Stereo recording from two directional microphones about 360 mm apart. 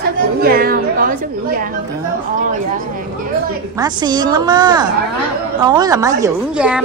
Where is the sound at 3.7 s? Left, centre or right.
Centre.